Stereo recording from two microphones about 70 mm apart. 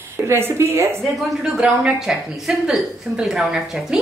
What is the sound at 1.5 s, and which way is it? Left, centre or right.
A woman's voice, centre.